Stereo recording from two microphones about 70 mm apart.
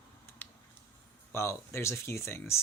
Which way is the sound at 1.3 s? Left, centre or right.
Left.